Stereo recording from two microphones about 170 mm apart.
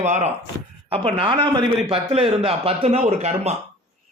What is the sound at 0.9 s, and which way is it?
A man's voice, 35° right (ahead or behind).